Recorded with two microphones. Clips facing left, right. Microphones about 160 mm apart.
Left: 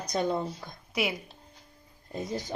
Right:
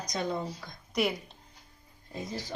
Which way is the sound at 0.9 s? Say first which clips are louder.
Right 1 dB; centre (ahead or behind).